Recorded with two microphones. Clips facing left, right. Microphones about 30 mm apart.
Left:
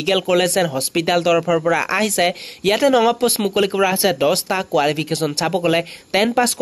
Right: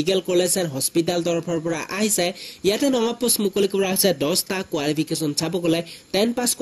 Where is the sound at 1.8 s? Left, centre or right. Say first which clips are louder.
Left 5 dB; left.